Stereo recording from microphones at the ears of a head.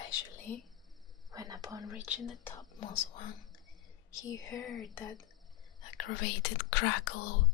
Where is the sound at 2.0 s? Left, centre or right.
Left.